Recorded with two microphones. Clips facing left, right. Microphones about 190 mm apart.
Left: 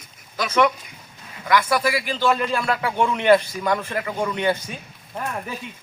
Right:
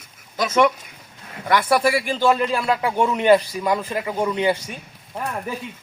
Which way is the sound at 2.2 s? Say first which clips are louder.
Right 2 dB; 10° right (ahead or behind).